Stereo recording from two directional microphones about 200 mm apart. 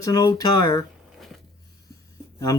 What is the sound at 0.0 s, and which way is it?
Speech, 15° left (ahead or behind).